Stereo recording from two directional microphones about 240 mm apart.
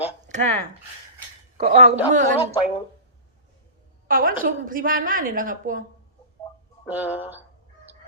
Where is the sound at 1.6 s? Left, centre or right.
Right.